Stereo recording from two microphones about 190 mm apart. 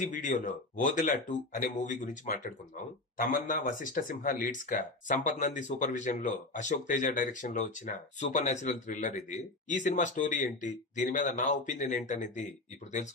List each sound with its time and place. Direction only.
0.0 s speech: 40° left (ahead or behind)